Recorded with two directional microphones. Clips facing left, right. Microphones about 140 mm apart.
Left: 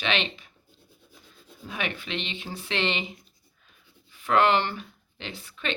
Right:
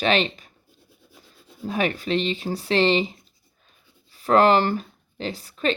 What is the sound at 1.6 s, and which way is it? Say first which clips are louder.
Speech: right 9 dB; 40° right (ahead or behind).